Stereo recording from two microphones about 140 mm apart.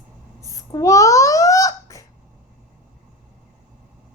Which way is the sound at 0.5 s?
25° left (ahead or behind).